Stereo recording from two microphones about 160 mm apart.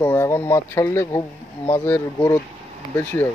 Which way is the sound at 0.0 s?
15° left (ahead or behind).